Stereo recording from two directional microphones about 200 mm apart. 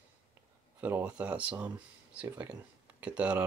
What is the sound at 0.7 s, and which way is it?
Speech, 10° right (ahead or behind).